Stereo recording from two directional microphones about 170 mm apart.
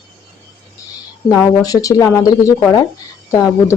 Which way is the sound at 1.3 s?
20° left (ahead or behind).